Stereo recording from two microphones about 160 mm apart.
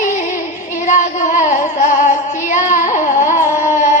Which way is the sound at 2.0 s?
50° left (ahead or behind).